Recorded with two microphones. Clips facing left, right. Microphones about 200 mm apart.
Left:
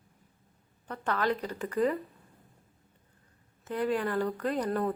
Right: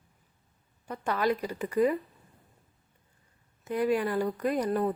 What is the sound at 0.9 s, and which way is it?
A woman's voice, 10° right (ahead or behind).